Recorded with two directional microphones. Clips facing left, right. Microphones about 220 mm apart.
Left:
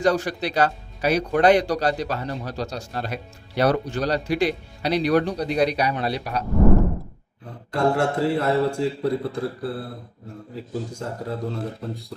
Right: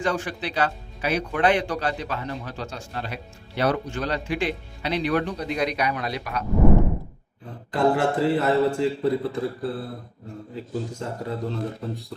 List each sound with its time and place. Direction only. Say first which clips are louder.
0.0 s speech: left 5 dB; 40° left (ahead or behind)
7.7 s a man's voice: even; centre (ahead or behind)